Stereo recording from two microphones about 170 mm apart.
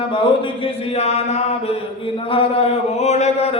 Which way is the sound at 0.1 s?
30° left (ahead or behind).